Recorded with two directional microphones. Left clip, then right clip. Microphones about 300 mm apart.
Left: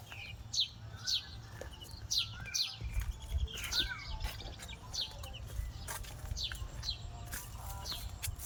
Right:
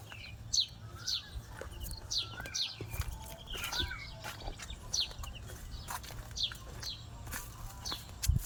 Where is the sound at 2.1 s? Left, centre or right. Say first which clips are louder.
Left 2 dB; centre.